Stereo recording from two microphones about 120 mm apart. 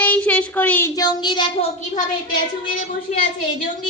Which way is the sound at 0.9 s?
35° left (ahead or behind).